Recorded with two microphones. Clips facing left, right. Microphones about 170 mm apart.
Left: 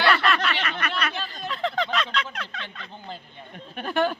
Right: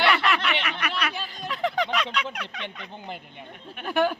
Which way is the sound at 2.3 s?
15° right (ahead or behind).